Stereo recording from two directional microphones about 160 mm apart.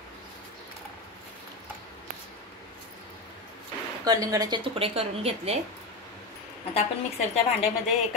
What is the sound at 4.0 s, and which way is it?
Speech, 25° right (ahead or behind).